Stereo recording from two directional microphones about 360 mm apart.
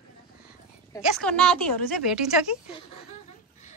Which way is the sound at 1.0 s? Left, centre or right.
Centre.